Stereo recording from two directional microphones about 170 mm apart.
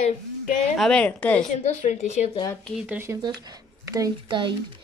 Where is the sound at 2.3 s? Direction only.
20° left (ahead or behind).